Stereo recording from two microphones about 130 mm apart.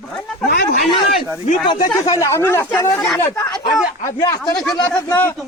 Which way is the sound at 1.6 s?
35° left (ahead or behind).